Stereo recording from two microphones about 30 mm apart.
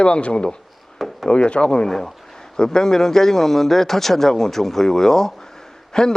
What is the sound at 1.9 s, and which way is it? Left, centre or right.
Speech, centre.